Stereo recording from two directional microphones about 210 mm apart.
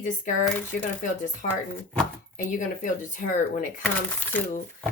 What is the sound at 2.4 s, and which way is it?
Speech, 40° left (ahead or behind).